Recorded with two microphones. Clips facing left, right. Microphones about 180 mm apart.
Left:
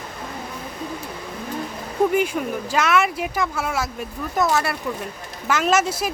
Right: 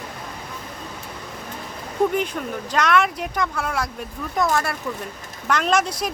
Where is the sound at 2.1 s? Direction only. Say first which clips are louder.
Left 3 dB; 5° left (ahead or behind).